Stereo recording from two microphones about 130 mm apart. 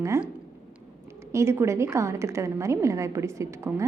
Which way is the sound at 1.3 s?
20° right (ahead or behind).